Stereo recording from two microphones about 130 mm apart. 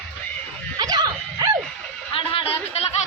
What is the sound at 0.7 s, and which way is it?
Dog, 30° right (ahead or behind).